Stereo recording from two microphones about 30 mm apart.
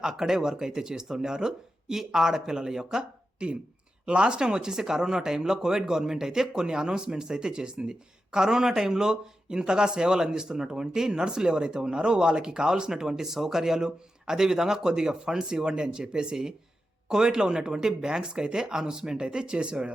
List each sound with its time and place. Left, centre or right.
0.1 s speech: centre
4.0 s speech: right
4.4 s speech: right